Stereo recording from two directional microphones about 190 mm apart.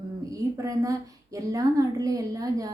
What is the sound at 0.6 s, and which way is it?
A woman's voice, 15° right (ahead or behind).